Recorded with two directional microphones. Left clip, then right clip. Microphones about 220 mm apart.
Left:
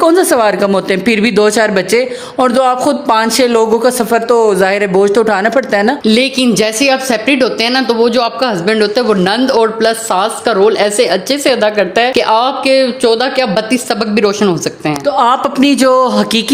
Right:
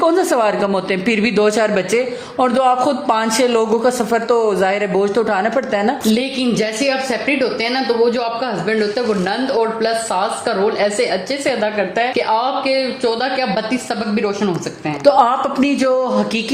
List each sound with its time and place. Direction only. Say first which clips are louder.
0.0 s speech: left 5 dB; 35° left (ahead or behind)
6.1 s speech: left 7 dB; 50° left (ahead or behind)
15.3 s speech: left 6 dB; 30° left (ahead or behind)